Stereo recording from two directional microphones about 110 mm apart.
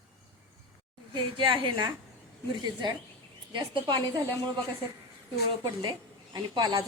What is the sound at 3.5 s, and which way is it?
Speech, 45° right (ahead or behind).